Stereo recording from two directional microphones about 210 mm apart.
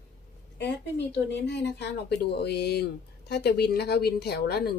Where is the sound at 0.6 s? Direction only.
55° left (ahead or behind).